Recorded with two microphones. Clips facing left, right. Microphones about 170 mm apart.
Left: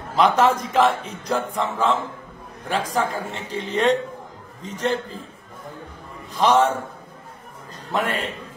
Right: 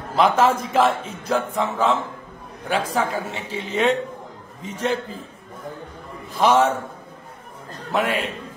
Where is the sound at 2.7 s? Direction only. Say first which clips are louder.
Right 1 dB; 10° right (ahead or behind).